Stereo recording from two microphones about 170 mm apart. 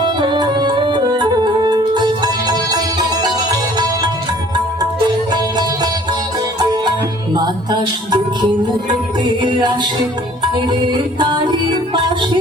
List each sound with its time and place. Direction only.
0.0 s music: 25° right (ahead or behind)
5.3 s music: 25° right (ahead or behind)